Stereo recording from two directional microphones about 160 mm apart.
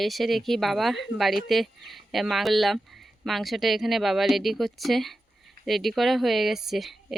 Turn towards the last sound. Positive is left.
turn(degrees=0)  # may be behind; listen again after turning